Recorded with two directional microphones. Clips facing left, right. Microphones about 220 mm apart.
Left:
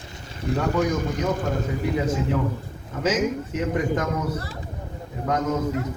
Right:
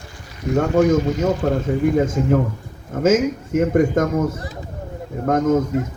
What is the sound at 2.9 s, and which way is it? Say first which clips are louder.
A man's voice: right 7 dB; 45° right (ahead or behind).